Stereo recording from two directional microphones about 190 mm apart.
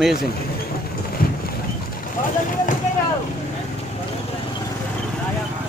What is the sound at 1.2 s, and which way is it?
Boat, 50° left (ahead or behind).